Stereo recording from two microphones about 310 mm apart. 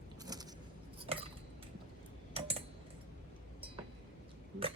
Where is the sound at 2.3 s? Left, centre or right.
Centre.